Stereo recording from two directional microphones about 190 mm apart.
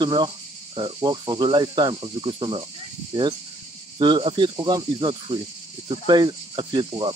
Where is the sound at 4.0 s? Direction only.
25° right (ahead or behind).